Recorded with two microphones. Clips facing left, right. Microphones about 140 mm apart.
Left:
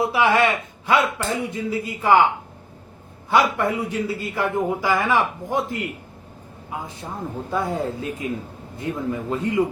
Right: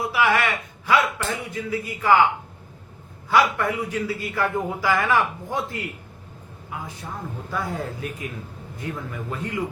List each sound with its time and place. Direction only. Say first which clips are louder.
0.0 s speech: left 3 dB; 25° left (ahead or behind)
3.2 s speech: left 1 dB; 25° left (ahead or behind)